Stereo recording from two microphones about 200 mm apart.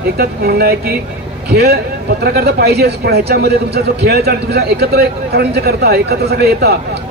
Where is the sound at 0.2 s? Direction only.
50° right (ahead or behind).